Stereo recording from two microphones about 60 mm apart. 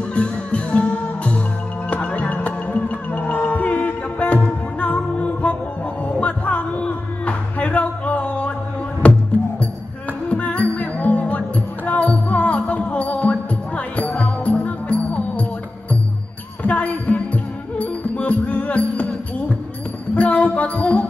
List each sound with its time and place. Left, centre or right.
0.1 s music: left
10.2 s music: left
16.6 s music: left
20.2 s music: left